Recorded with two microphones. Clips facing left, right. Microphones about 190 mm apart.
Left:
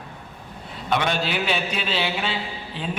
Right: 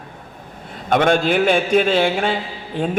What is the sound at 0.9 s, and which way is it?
A man's voice, 50° right (ahead or behind).